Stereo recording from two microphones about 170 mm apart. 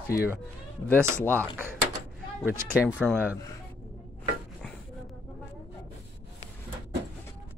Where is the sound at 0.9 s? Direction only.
15° right (ahead or behind).